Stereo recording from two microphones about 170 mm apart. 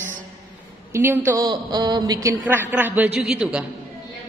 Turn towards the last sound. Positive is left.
turn(degrees=-5)  # may be behind; listen again after turning